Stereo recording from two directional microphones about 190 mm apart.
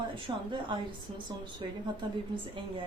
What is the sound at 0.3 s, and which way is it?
Speech, 25° right (ahead or behind).